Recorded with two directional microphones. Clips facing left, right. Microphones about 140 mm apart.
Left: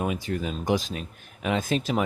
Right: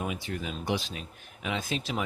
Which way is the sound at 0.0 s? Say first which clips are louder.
Left 6 dB; 45° left (ahead or behind).